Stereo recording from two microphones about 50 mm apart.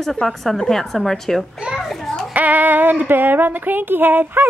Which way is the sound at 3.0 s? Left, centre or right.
Right.